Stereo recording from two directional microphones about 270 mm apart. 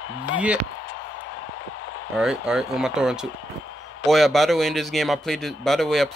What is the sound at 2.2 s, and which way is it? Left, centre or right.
Speech, centre.